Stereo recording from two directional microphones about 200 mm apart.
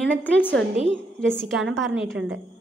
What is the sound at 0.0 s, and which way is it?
A woman's voice, 5° left (ahead or behind).